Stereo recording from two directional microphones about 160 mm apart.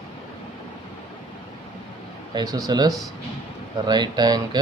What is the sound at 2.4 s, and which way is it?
Speech, 25° right (ahead or behind).